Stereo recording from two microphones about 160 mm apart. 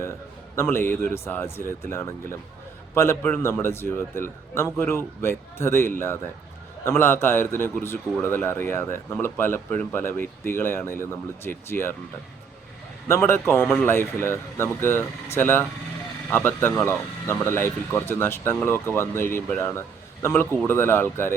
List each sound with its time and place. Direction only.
0.5 s speech: 15° left (ahead or behind)
13.1 s speech: 15° left (ahead or behind)